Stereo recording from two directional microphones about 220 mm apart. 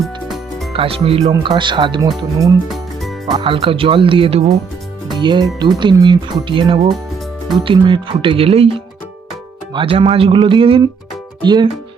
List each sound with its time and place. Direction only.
0.0 s music: centre (ahead or behind)
0.7 s speech: 25° right (ahead or behind)
2.6 s music: centre (ahead or behind)
3.2 s speech: 25° right (ahead or behind)
5.0 s music: 20° right (ahead or behind)
5.5 s speech: 20° right (ahead or behind)